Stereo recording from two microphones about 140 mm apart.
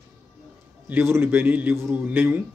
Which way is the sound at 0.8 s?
15° right (ahead or behind).